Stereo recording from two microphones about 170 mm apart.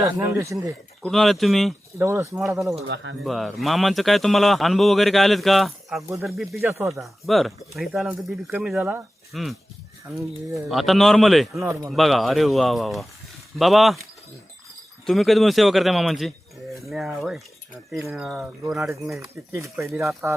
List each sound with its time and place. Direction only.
0.0 s speech: 20° right (ahead or behind)
1.0 s a man's voice: centre (ahead or behind)
2.0 s speech: 15° right (ahead or behind)
2.8 s speech: 90° right
3.2 s a man's voice: centre (ahead or behind)
10.1 s speech: 15° right (ahead or behind)
10.7 s a man's voice: centre (ahead or behind)
15.0 s a man's voice: centre (ahead or behind)
19.2 s speech: 15° right (ahead or behind)